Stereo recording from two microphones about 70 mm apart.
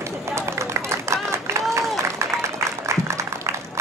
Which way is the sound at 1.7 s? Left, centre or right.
Right.